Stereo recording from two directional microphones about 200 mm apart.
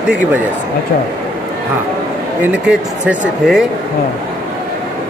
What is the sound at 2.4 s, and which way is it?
Speech, 5° right (ahead or behind).